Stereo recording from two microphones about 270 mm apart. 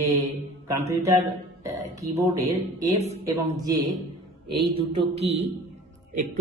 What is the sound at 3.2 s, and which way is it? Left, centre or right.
Speech, centre.